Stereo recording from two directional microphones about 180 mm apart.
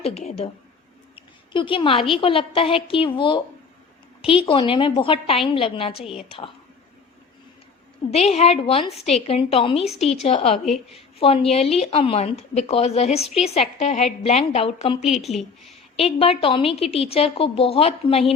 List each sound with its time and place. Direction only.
0.0 s a woman's voice: 35° left (ahead or behind)
1.1 s a sound: 30° left (ahead or behind)
2.1 s a woman's voice: 30° left (ahead or behind)
6.0 s a woman's voice: 5° right (ahead or behind)
8.1 s a woman's voice: 35° left (ahead or behind)
8.9 s a woman's voice: centre (ahead or behind)
9.1 s a woman's voice: 30° left (ahead or behind)
9.8 s a woman's voice: centre (ahead or behind)
10.1 s a woman's voice: 35° left (ahead or behind)
15.0 s a woman's voice: centre (ahead or behind)
16.0 s a woman's voice: 35° left (ahead or behind)